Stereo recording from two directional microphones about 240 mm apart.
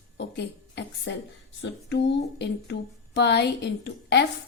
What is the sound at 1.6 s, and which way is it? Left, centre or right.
Speech, left.